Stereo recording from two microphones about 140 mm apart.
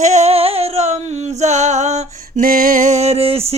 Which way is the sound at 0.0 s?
55° right (ahead or behind).